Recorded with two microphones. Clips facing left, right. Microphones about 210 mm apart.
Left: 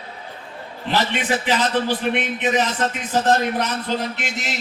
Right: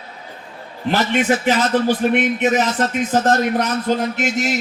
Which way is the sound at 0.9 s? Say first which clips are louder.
Right 4 dB; 45° right (ahead or behind).